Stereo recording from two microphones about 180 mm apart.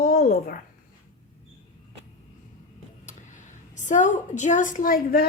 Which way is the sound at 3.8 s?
45° left (ahead or behind).